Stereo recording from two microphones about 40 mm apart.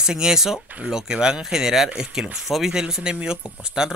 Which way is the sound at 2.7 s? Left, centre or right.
Centre.